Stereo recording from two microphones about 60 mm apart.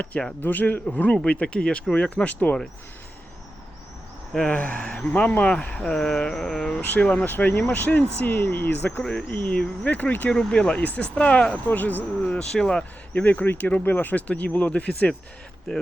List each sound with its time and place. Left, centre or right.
0.4 s speech: left
4.4 s speech: left
4.8 s speech: centre
5.1 s speech: left; by 6.8 s centre
6.8 s speech: left
7.3 s speech: left
9.4 s speech: centre
9.8 s speech: left
10.3 s speech: centre
10.8 s speech: left
11.7 s speech: left
12.4 s speech: centre
13.2 s speech: left